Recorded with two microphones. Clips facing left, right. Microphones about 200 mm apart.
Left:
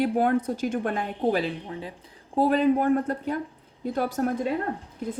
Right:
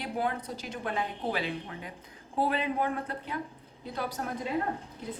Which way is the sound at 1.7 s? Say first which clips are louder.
Left 7 dB; 30° left (ahead or behind).